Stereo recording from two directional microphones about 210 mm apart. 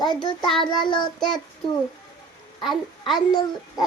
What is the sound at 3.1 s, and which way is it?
Speech, 20° left (ahead or behind).